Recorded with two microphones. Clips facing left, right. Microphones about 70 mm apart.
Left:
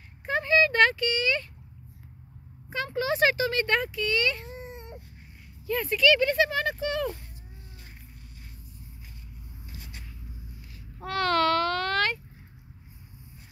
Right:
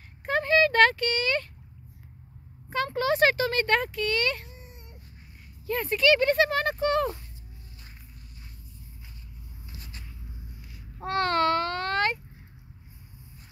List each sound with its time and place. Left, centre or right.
0.2 s a sound: right
2.7 s speech: right
4.6 s baby cry: left
5.7 s speech: right
11.0 s babbling: right